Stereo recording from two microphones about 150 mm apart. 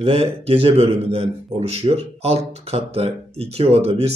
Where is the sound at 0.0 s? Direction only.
40° right (ahead or behind).